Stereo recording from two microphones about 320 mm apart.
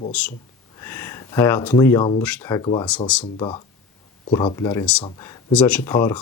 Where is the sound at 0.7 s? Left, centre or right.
Centre.